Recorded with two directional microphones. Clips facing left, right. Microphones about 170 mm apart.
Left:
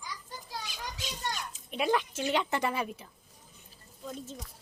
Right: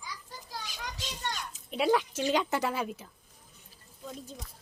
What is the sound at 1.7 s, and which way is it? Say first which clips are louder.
A woman's voice: right 2 dB; 10° right (ahead or behind).